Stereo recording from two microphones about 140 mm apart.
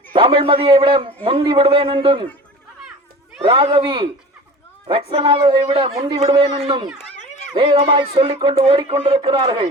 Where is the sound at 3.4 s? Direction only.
35° right (ahead or behind).